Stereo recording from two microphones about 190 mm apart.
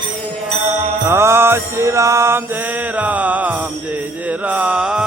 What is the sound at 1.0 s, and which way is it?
Mantra, 15° right (ahead or behind).